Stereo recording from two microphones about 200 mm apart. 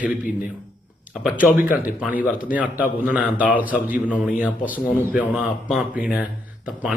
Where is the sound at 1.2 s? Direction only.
5° right (ahead or behind).